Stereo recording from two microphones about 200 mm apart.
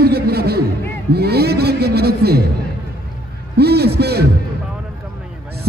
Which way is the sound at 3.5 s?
55° right (ahead or behind).